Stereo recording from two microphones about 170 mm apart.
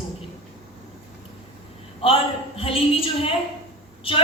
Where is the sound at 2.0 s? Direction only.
30° left (ahead or behind).